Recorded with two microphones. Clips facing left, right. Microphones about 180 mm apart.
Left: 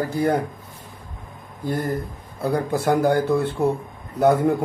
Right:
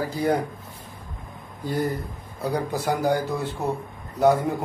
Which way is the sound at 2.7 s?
55° left (ahead or behind).